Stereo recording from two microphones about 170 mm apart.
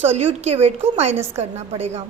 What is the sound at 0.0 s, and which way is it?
A woman's voice, 35° right (ahead or behind).